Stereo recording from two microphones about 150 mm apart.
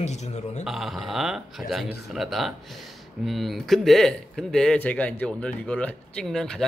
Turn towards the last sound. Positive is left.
turn(degrees=5)  # may be behind; listen again after turning